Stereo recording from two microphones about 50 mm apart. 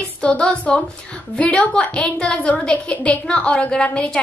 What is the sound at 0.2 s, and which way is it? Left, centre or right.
Speech, centre.